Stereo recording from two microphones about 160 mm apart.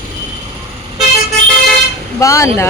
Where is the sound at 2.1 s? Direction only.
20° left (ahead or behind).